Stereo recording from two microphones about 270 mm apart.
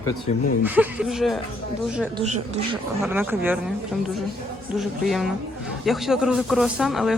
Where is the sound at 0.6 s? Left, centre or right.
Centre.